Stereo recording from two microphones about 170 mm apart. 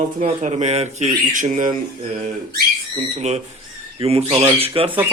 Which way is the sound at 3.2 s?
40° right (ahead or behind).